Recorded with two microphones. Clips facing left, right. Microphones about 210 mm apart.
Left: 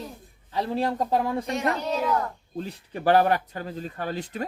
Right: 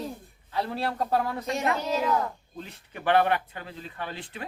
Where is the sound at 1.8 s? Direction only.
Centre (ahead or behind).